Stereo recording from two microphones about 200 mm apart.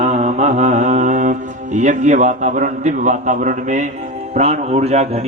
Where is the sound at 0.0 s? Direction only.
35° right (ahead or behind).